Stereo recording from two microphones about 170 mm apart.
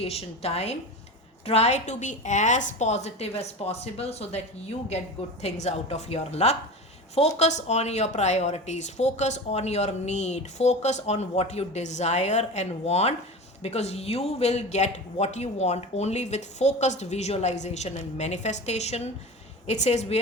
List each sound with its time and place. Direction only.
0.0 s speech: 35° left (ahead or behind)
5.4 s speech: 40° left (ahead or behind)